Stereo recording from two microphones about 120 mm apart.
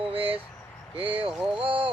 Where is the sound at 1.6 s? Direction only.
45° right (ahead or behind).